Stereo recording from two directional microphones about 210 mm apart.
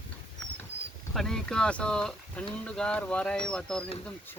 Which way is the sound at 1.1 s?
Centre (ahead or behind).